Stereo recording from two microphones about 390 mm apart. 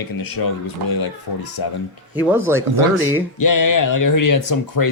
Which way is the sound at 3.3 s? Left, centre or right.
Left.